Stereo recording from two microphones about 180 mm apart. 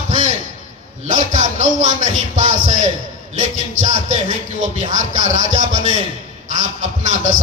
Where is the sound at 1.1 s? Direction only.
45° right (ahead or behind).